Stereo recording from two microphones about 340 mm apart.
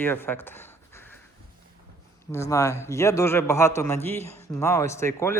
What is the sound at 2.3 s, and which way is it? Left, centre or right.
A man's voice, centre.